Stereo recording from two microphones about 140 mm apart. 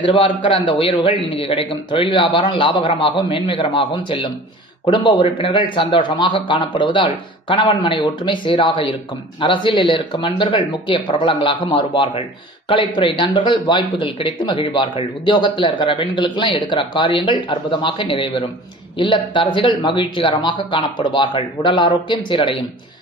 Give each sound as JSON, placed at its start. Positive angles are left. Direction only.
{"t": 0.0, "sound": "a man's voice", "side_deg": 35}